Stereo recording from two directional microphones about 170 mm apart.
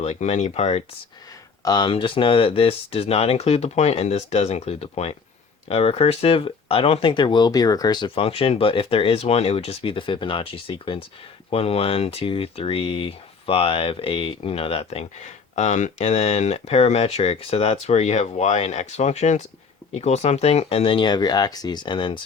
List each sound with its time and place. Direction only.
0.0 s speech: 40° left (ahead or behind)
1.6 s speech: 25° left (ahead or behind)